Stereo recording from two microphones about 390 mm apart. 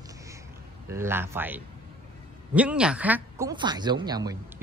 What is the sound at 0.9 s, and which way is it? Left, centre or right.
Speech, centre.